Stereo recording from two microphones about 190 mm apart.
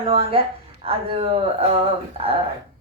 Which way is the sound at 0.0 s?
30° right (ahead or behind).